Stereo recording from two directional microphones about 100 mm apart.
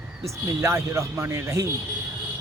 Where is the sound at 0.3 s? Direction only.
30° right (ahead or behind).